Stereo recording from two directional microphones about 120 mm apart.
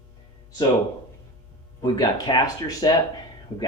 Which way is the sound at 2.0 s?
35° left (ahead or behind).